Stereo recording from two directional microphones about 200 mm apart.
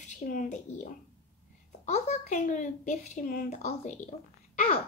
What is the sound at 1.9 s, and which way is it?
A woman's voice, 35° left (ahead or behind).